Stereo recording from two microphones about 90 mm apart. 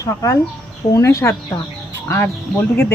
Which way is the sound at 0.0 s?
40° left (ahead or behind).